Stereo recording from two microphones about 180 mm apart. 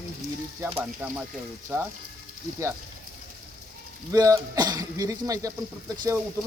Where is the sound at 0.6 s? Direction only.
15° right (ahead or behind).